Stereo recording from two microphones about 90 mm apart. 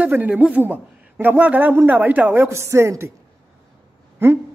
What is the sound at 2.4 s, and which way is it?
Speech, 30° right (ahead or behind).